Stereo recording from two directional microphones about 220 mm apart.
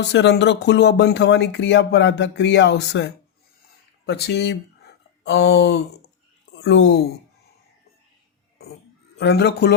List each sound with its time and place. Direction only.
0.0 s a woman's voice: 50° left (ahead or behind)
9.1 s speech: 50° left (ahead or behind)